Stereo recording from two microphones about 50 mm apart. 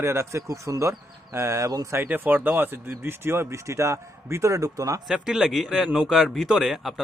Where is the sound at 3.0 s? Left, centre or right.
Right.